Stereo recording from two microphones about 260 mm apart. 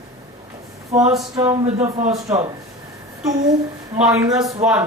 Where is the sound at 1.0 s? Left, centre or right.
Centre.